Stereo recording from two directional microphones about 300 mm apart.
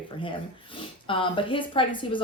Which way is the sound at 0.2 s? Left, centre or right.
Centre.